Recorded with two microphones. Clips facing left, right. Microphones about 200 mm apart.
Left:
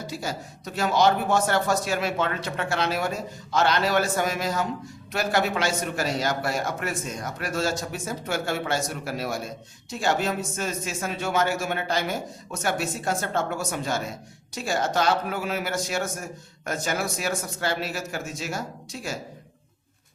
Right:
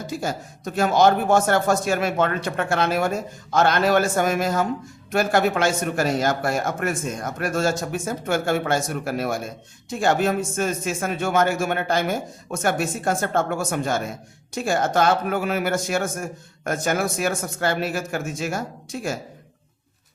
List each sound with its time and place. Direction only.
0.1 s speech: 50° right (ahead or behind)